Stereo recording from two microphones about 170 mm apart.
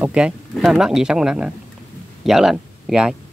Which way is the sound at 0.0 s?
5° right (ahead or behind).